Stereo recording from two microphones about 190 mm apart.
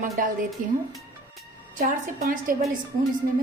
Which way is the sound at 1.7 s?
45° right (ahead or behind).